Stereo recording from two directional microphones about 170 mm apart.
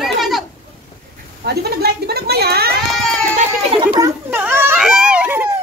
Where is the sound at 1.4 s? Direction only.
70° right (ahead or behind).